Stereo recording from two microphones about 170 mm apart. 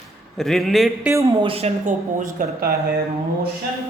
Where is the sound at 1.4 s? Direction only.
35° right (ahead or behind); by 2.7 s 55° right (ahead or behind).